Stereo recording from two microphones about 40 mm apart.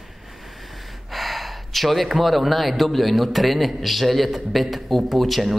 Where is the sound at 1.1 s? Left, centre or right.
Centre.